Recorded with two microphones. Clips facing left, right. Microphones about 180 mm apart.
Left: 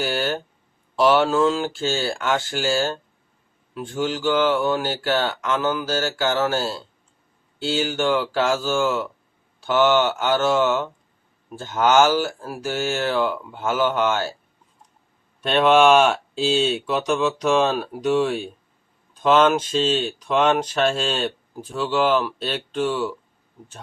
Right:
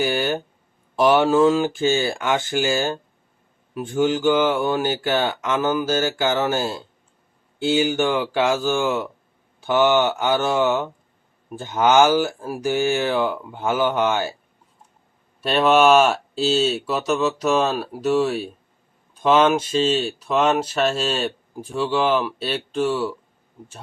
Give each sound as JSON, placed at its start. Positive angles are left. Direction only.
{"t": 0.0, "sound": "speech", "side_deg": -15}
{"t": 15.4, "sound": "speech", "side_deg": -5}